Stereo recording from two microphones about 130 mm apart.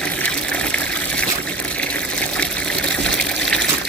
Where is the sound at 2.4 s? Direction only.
5° left (ahead or behind).